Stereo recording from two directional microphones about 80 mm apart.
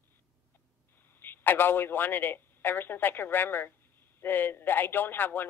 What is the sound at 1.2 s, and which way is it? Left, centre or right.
A man's voice, left.